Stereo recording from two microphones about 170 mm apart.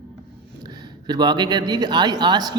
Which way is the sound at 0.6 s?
25° right (ahead or behind).